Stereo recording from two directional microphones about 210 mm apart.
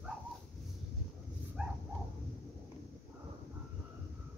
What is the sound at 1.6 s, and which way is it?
Dog, 5° right (ahead or behind).